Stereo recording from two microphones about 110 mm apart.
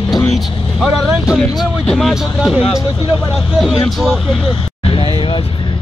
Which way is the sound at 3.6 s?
Centre (ahead or behind).